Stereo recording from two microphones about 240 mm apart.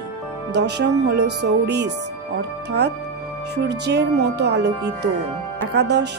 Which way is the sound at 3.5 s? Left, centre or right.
Right.